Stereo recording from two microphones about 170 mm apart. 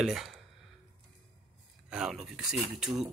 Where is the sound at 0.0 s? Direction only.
Centre (ahead or behind).